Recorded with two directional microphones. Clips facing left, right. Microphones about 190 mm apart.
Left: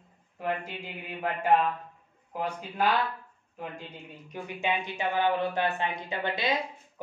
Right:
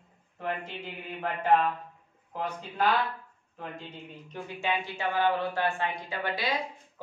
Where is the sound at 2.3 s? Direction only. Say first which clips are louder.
Left 1 dB; 10° left (ahead or behind).